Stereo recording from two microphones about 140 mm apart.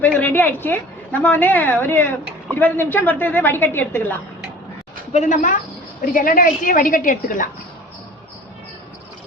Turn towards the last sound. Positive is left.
turn(degrees=70)  # may be behind; listen again after turning